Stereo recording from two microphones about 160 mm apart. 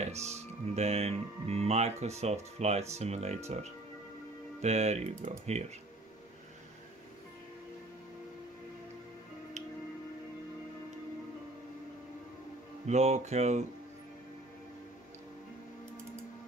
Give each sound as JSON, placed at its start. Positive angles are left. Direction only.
{"t": 0.0, "sound": "speech", "side_deg": -45}
{"t": 12.8, "sound": "speech", "side_deg": -45}